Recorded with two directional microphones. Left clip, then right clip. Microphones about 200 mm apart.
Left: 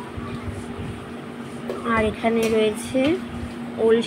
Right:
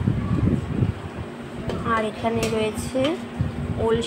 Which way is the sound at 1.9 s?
15° left (ahead or behind).